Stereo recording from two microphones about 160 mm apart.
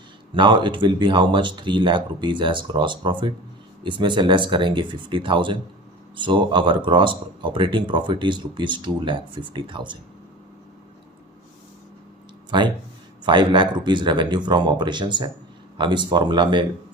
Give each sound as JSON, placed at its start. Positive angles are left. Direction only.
{"t": 0.3, "sound": "speech", "side_deg": -30}
{"t": 12.5, "sound": "speech", "side_deg": -30}